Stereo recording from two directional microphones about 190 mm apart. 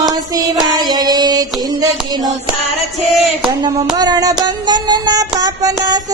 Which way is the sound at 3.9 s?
20° right (ahead or behind).